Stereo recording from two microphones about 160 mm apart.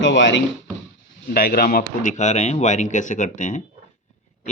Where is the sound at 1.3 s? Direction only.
65° left (ahead or behind).